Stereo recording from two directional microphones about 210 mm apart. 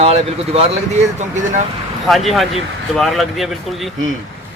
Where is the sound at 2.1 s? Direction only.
Centre (ahead or behind).